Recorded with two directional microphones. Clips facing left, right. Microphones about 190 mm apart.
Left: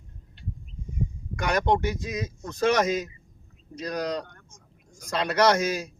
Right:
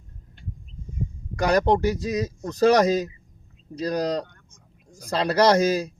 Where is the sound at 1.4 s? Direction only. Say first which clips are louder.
Right 4 dB; 35° right (ahead or behind).